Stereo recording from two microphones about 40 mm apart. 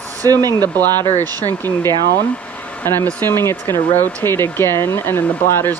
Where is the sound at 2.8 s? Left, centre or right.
Left.